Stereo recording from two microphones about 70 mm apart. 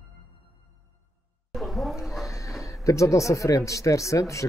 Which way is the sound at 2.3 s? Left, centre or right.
Left.